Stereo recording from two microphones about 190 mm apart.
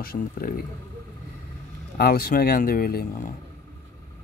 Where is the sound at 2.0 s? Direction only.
55° left (ahead or behind).